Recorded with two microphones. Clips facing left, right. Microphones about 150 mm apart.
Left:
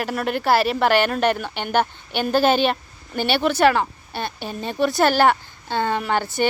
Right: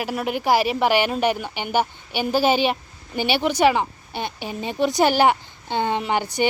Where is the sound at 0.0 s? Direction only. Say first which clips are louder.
Left 1 dB; 10° right (ahead or behind).